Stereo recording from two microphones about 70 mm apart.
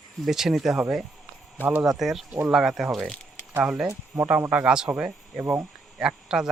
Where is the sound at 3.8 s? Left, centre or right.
Right.